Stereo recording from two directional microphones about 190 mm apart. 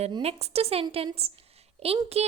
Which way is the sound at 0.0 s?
30° right (ahead or behind).